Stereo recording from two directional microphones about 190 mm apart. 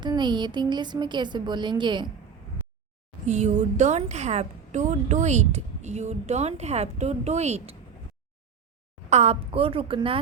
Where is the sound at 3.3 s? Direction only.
40° right (ahead or behind).